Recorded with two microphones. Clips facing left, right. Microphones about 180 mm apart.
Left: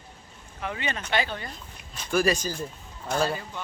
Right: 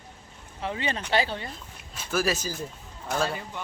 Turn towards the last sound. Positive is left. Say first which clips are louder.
# left 2 dB
turn(degrees=0)  # may be behind; listen again after turning